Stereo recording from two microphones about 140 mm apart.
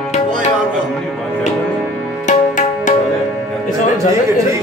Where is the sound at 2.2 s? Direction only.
65° left (ahead or behind).